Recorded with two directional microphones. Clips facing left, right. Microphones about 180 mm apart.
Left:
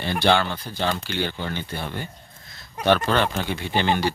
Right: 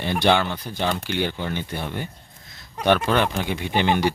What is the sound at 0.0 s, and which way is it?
Speech, 20° right (ahead or behind).